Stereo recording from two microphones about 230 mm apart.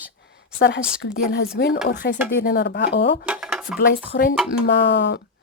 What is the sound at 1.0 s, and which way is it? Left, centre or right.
A woman's voice, left.